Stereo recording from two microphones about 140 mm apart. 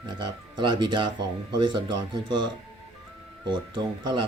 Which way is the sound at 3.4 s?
35° right (ahead or behind).